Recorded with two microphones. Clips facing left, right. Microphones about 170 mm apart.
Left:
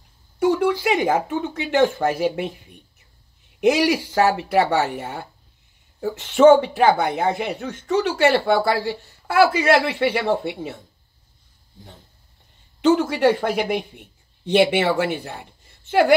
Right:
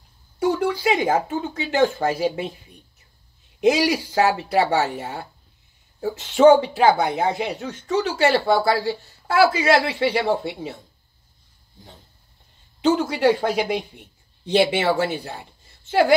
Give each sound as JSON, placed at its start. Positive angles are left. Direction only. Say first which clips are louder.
{"t": 0.4, "sound": "speech", "louder": "left 2 dB", "side_deg": 60}
{"t": 3.6, "sound": "speech", "louder": "left 1 dB", "side_deg": 55}
{"t": 6.1, "sound": "speech", "louder": "left 1 dB", "side_deg": 50}
{"t": 12.8, "sound": "speech", "louder": "left 1 dB", "side_deg": 55}
{"t": 15.8, "sound": "a sound", "louder": "left 1 dB", "side_deg": 60}